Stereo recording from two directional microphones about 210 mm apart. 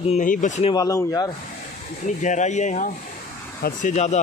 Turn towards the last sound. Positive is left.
turn(degrees=35)  # may be behind; listen again after turning